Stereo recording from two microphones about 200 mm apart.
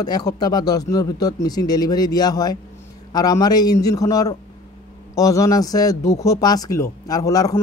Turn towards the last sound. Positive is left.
turn(degrees=20)  # may be behind; listen again after turning